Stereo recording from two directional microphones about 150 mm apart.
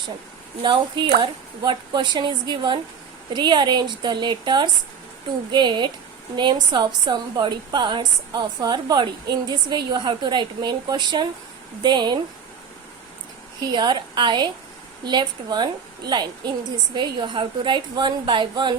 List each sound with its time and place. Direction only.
0.6 s a woman's voice: 30° right (ahead or behind)
13.6 s a woman's voice: 30° right (ahead or behind)